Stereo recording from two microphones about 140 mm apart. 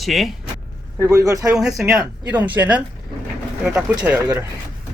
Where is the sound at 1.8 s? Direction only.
10° right (ahead or behind).